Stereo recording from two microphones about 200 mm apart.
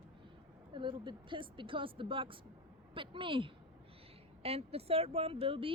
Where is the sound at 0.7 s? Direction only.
25° right (ahead or behind).